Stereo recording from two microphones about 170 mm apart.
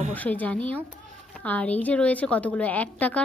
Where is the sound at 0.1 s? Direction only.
10° left (ahead or behind).